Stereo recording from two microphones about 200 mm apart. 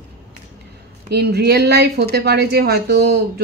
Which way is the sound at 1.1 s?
55° right (ahead or behind).